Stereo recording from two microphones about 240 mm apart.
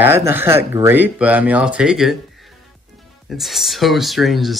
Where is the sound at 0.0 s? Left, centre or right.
Centre.